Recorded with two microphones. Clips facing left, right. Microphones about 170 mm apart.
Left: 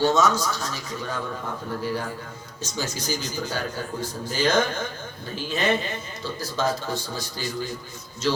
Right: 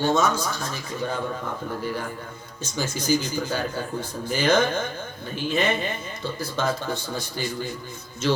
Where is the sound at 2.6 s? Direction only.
50° right (ahead or behind).